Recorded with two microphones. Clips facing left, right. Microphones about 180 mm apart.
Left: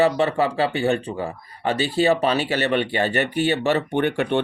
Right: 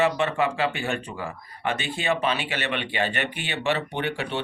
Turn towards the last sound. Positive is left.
turn(degrees=55)  # may be behind; listen again after turning